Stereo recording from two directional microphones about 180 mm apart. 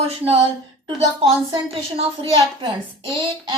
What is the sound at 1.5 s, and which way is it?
Speech, 30° right (ahead or behind).